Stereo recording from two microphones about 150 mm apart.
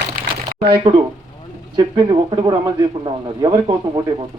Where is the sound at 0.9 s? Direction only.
30° right (ahead or behind).